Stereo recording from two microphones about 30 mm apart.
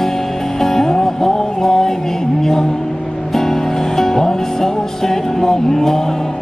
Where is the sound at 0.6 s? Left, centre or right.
Centre.